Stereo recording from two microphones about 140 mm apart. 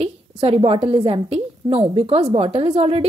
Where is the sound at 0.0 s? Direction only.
45° right (ahead or behind).